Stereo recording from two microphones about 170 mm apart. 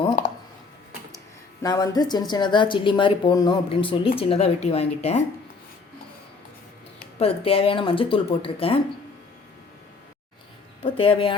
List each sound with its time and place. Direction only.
1.6 s speech: 20° left (ahead or behind); by 5.2 s 35° left (ahead or behind)
7.2 s speech: 35° left (ahead or behind)
10.8 s speech: 30° left (ahead or behind)